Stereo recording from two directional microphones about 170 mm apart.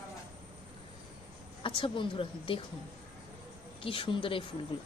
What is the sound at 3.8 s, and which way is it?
Speech, 30° left (ahead or behind).